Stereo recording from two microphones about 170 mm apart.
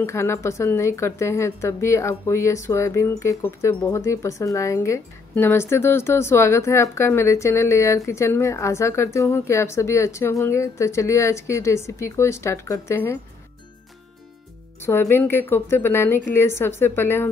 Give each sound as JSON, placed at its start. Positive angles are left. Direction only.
{"t": 0.0, "sound": "a woman's voice", "side_deg": 15}
{"t": 14.8, "sound": "a woman's voice", "side_deg": 15}